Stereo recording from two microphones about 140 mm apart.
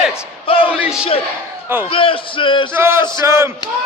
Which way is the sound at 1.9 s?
40° left (ahead or behind).